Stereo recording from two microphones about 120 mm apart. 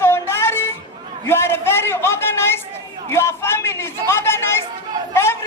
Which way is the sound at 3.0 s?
20° left (ahead or behind).